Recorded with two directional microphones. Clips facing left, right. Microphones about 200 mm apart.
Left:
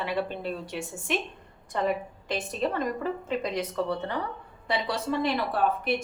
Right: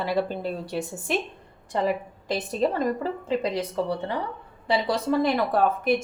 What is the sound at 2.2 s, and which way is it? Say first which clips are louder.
A woman's voice: right 4 dB; 35° right (ahead or behind).